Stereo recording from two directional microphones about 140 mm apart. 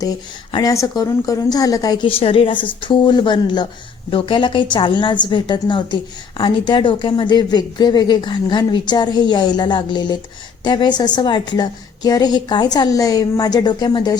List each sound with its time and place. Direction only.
0.5 s a woman's voice: 25° left (ahead or behind)
2.0 s a woman's voice: 40° left (ahead or behind)